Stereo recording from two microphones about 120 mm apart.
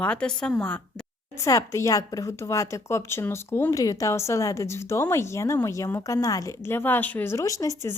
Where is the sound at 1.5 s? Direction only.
25° left (ahead or behind).